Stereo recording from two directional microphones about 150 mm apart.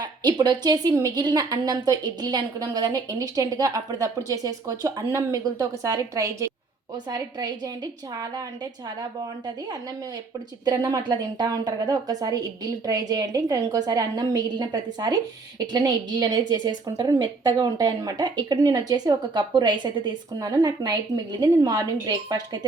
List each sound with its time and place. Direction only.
0.0 s a woman's voice: 30° right (ahead or behind)
10.7 s a woman's voice: 25° right (ahead or behind)